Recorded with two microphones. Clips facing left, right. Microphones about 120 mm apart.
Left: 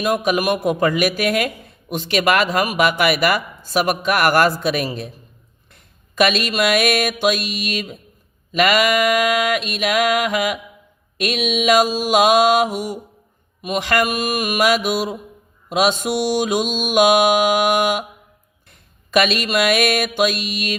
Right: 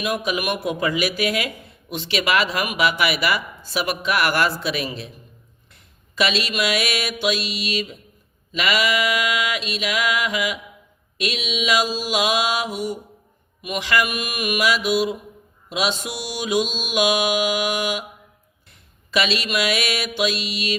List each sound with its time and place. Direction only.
0.0 s mantra: 45° left (ahead or behind)
5.7 s music: 50° left (ahead or behind)
8.5 s mantra: 50° left (ahead or behind)